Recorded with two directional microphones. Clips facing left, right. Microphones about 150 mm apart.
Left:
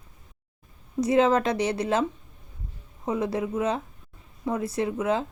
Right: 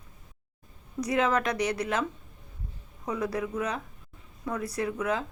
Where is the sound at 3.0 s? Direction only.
25° left (ahead or behind).